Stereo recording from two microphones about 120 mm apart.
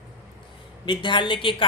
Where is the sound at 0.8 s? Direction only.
40° left (ahead or behind).